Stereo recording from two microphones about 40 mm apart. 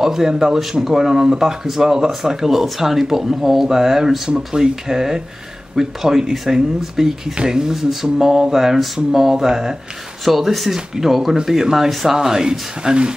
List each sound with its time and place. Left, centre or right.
0.0 s speech: centre